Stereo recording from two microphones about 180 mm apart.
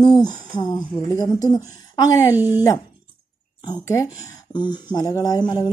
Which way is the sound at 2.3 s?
10° right (ahead or behind).